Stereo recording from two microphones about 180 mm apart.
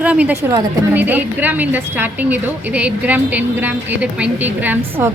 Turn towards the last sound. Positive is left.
turn(degrees=-10)  # may be behind; listen again after turning